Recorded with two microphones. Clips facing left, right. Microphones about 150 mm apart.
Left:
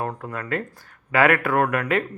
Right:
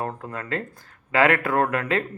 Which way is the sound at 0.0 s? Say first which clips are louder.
Left 1 dB; 25° right (ahead or behind).